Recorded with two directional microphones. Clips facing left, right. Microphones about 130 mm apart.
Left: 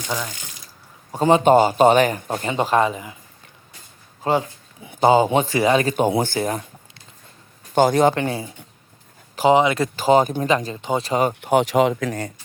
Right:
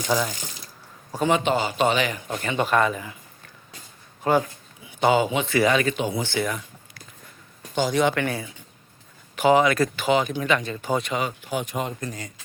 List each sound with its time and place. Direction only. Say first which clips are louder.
0.1 s ratchet: right 4 dB; 5° right (ahead or behind)
1.1 s speech: left 5 dB; 30° left (ahead or behind)
1.4 s a man's voice: left 9 dB; 45° left (ahead or behind)
2.4 s speech: left 2 dB; 25° left (ahead or behind)
4.2 s speech: left 1 dB; 25° left (ahead or behind)
4.8 s speech: left 5 dB; 40° left (ahead or behind)
6.1 s a man's voice: left 5 dB; 50° left (ahead or behind)
7.8 s a man's voice: left 6 dB; 45° left (ahead or behind)
8.1 s speech: left 2 dB; 30° left (ahead or behind)
9.9 s speech: left 6 dB; 40° left (ahead or behind)
11.3 s speech: left 10 dB; 60° left (ahead or behind); by 12.1 s 85° left